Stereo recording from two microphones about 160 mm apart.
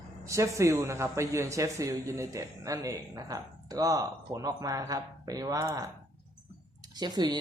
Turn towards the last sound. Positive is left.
turn(degrees=-25)  # may be behind; listen again after turning